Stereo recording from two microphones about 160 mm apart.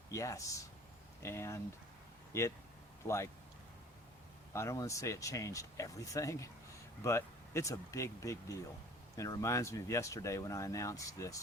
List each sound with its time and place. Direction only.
0.1 s speech: 20° left (ahead or behind)
4.5 s speech: 20° left (ahead or behind)